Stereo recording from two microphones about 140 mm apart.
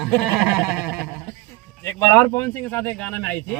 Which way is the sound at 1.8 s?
15° left (ahead or behind).